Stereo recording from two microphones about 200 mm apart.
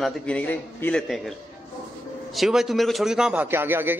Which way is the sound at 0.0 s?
5° left (ahead or behind).